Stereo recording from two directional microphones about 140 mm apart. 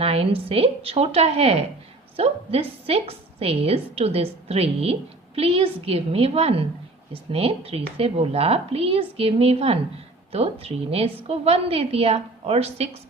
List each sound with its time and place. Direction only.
0.0 s a woman's voice: 45° right (ahead or behind)